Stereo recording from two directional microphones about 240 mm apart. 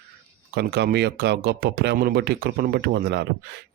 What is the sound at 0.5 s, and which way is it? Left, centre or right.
Speech, right.